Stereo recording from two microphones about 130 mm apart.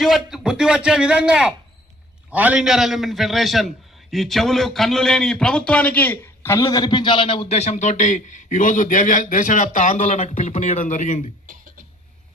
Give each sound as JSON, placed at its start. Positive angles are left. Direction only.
{"t": 0.0, "sound": "a man's voice", "side_deg": 0}